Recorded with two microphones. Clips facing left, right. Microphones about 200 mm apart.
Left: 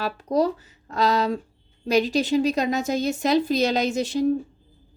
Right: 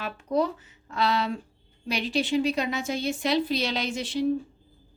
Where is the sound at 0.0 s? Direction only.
40° left (ahead or behind).